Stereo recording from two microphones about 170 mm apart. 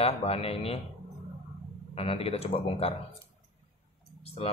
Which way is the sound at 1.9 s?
35° left (ahead or behind).